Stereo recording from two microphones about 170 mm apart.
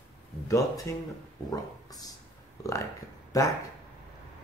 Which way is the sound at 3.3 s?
20° left (ahead or behind).